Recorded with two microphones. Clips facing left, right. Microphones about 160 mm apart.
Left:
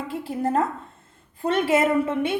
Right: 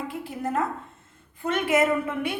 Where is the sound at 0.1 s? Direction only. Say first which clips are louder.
Left 5 dB; 30° left (ahead or behind).